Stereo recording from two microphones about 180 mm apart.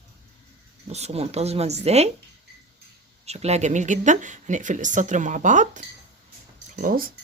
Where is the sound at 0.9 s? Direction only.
35° right (ahead or behind).